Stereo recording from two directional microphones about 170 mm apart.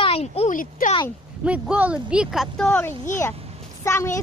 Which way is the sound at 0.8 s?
55° left (ahead or behind).